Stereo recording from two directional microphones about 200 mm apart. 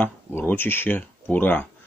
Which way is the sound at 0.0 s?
10° left (ahead or behind).